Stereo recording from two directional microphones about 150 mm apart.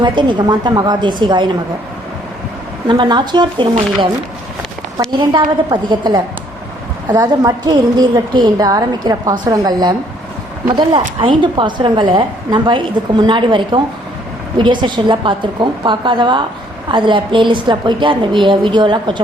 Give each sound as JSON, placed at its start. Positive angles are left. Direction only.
{"t": 0.0, "sound": "a woman's voice", "side_deg": -30}
{"t": 2.8, "sound": "a woman's voice", "side_deg": -30}